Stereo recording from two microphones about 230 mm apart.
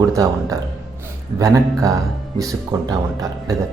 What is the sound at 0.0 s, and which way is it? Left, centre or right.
Speech, centre.